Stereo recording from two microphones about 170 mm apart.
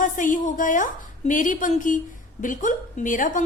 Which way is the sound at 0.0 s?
50° left (ahead or behind).